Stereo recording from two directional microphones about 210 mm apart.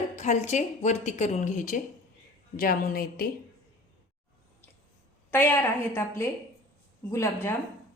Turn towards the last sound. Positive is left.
turn(degrees=10)  # may be behind; listen again after turning